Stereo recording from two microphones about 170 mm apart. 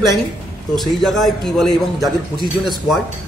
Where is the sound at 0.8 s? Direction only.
Centre (ahead or behind).